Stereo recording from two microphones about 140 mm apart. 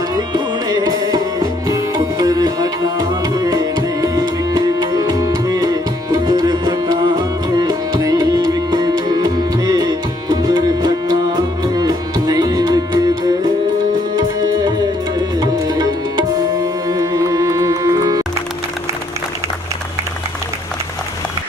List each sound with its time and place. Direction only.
0.1 s music: 30° right (ahead or behind)
15.4 s music: 30° right (ahead or behind)